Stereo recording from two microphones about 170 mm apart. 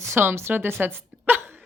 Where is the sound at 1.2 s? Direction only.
10° right (ahead or behind).